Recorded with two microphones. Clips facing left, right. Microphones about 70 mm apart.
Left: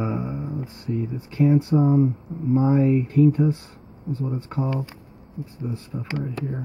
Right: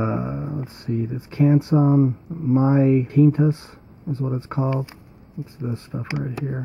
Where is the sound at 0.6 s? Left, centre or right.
Right.